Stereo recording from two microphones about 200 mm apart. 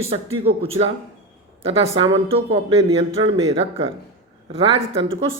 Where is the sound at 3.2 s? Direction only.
30° right (ahead or behind).